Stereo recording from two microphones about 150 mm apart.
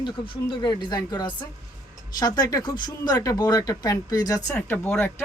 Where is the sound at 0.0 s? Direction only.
30° left (ahead or behind).